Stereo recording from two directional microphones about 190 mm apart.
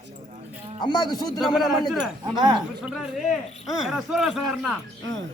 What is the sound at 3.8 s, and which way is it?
Speech, centre (ahead or behind).